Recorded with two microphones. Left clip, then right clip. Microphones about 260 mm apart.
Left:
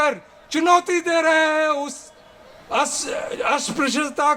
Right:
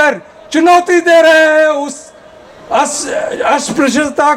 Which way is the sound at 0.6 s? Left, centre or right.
Left.